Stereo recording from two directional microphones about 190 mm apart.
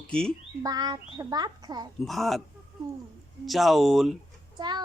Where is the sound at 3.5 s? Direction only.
Centre (ahead or behind).